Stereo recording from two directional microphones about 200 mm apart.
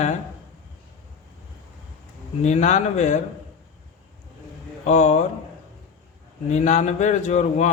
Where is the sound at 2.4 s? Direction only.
35° left (ahead or behind).